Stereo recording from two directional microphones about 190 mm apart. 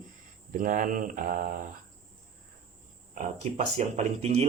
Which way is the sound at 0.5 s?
45° right (ahead or behind).